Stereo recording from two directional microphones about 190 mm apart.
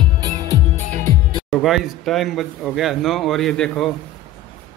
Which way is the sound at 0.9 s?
45° right (ahead or behind).